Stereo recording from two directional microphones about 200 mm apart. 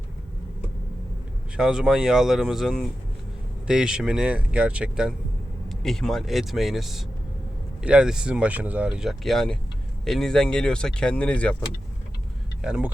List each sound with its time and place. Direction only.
1.5 s speech: 5° right (ahead or behind)
12.6 s speech: 5° right (ahead or behind)